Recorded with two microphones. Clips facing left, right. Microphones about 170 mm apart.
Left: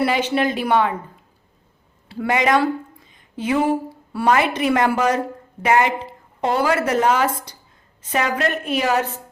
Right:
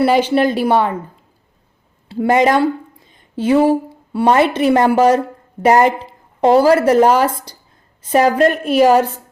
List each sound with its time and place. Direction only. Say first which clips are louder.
0.0 s a woman's voice: right 6 dB; 30° right (ahead or behind)
2.0 s a woman's voice: right 6 dB; 25° right (ahead or behind)
3.1 s a sound: right 7 dB; 30° right (ahead or behind)
4.1 s a woman's voice: right 5 dB; 25° right (ahead or behind)